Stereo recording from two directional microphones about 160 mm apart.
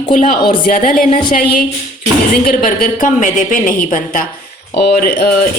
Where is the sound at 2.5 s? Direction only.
60° left (ahead or behind).